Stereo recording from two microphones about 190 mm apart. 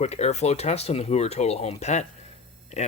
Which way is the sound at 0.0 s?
35° left (ahead or behind).